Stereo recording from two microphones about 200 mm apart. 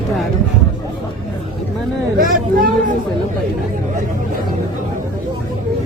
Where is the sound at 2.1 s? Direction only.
45° right (ahead or behind).